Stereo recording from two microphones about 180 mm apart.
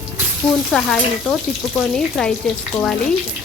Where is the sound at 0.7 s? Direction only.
5° left (ahead or behind).